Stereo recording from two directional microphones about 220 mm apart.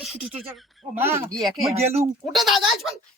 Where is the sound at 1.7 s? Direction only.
30° right (ahead or behind).